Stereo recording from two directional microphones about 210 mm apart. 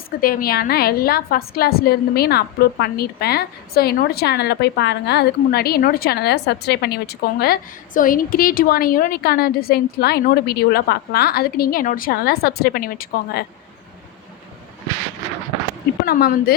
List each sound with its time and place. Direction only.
0.2 s a woman's voice: 45° left (ahead or behind)
16.0 s a woman's voice: 45° left (ahead or behind)